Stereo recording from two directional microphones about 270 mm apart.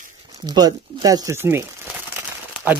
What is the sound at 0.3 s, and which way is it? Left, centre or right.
Speech, centre.